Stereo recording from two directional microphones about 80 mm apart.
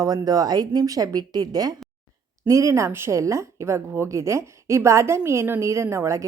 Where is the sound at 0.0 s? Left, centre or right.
Right.